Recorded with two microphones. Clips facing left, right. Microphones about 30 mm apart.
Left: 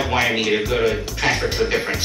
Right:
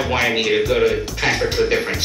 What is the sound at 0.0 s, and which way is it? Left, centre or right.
Speech, centre.